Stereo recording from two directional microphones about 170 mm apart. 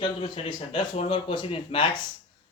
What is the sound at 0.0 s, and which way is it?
Speech, 30° left (ahead or behind).